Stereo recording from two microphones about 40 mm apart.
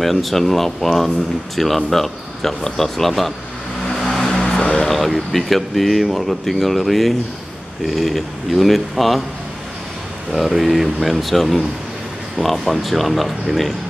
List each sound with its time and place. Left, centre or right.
0.0 s speech: centre
3.9 s vehicle: centre
4.5 s music: left
4.7 s speech: centre
10.3 s speech: centre